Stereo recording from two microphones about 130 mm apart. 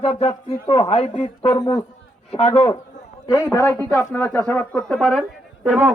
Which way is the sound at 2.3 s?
50° left (ahead or behind).